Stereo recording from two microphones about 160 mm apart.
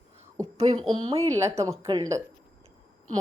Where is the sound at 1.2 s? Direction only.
20° right (ahead or behind).